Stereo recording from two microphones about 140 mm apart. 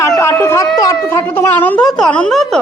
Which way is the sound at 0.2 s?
20° left (ahead or behind).